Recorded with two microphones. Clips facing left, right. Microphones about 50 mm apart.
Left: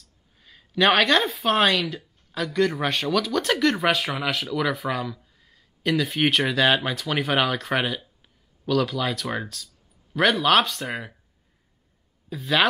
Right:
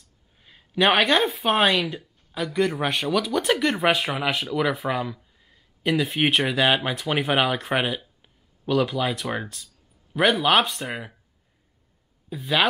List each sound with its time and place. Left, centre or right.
0.4 s speech: centre
3.8 s speech: right
5.2 s a sound: centre
6.0 s speech: right
10.9 s speech: centre
12.3 s speech: centre